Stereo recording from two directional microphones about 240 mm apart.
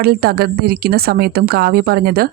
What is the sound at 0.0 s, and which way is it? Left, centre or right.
A woman's voice, right.